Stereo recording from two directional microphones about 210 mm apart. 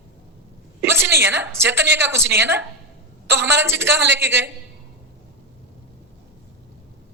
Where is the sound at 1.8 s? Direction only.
55° right (ahead or behind).